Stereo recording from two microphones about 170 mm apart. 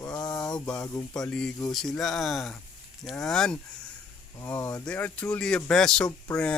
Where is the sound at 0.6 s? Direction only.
5° left (ahead or behind).